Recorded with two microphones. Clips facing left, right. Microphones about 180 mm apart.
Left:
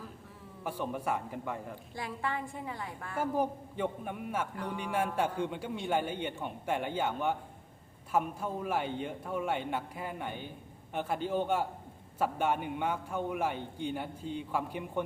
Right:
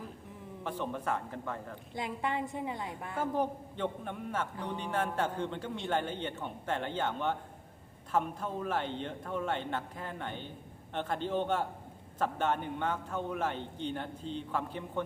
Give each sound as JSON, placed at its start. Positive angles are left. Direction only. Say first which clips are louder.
{"t": 0.6, "sound": "a man's voice", "louder": "left 1 dB", "side_deg": 10}
{"t": 2.0, "sound": "a woman's voice", "louder": "right 2 dB", "side_deg": -20}
{"t": 3.2, "sound": "a man's voice", "louder": "left 1 dB", "side_deg": 10}
{"t": 4.5, "sound": "a woman's voice", "louder": "even", "side_deg": -20}
{"t": 4.8, "sound": "a man's voice", "louder": "left 1 dB", "side_deg": 10}